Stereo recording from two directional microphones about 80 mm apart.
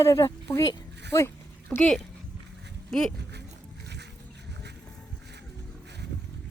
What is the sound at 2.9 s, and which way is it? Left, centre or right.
Speech, centre.